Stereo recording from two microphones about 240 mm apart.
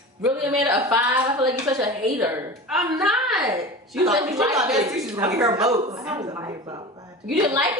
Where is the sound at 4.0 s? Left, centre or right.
Centre.